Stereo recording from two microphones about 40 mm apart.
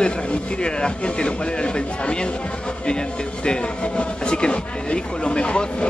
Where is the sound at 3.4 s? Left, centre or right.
Left.